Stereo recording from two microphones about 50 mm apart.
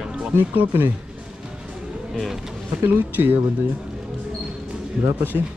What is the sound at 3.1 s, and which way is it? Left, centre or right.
Speech, right.